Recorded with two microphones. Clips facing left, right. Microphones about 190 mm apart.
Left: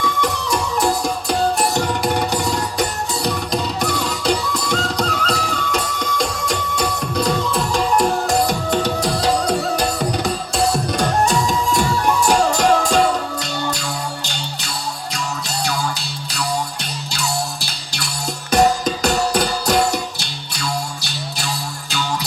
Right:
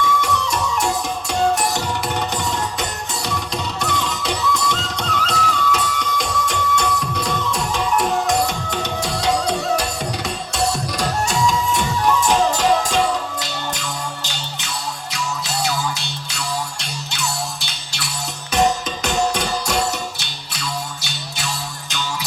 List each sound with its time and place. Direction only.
0.0 s music: 35° left (ahead or behind)
11.0 s music: 55° left (ahead or behind)
11.3 s music: 35° left (ahead or behind)
18.5 s music: 35° left (ahead or behind)